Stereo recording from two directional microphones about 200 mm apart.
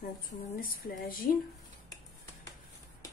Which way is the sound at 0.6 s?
45° left (ahead or behind).